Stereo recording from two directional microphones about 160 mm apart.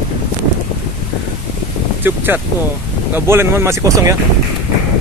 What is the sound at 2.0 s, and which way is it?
Speech, 10° right (ahead or behind).